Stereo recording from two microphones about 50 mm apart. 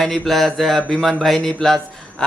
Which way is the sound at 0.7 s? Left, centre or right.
Centre.